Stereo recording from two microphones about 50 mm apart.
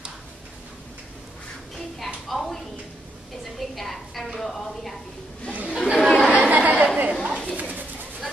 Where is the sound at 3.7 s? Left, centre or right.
Centre.